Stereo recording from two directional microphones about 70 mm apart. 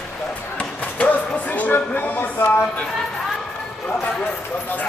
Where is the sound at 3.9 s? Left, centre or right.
Centre.